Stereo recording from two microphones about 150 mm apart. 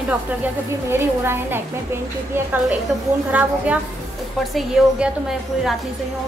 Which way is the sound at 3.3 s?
10° right (ahead or behind).